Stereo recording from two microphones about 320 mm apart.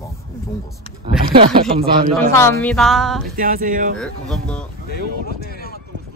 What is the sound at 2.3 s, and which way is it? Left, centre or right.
Speech, centre.